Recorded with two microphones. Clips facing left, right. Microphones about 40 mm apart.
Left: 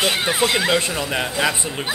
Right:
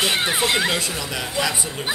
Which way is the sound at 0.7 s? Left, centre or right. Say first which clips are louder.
Left 5 dB; left.